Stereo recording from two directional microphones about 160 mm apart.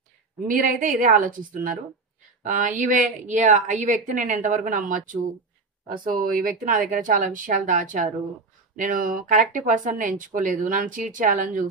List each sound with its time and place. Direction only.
0.5 s speech: 55° right (ahead or behind)